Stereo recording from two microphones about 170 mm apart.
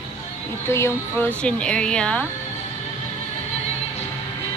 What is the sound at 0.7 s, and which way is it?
Speech, 15° left (ahead or behind).